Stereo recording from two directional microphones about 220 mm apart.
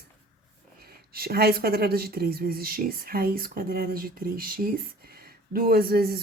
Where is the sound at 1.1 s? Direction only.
45° right (ahead or behind).